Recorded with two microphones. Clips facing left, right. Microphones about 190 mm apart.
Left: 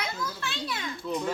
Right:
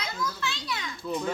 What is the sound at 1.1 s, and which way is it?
Speech, centre (ahead or behind).